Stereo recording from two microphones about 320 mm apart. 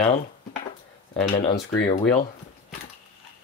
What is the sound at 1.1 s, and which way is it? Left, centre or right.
Speech, centre.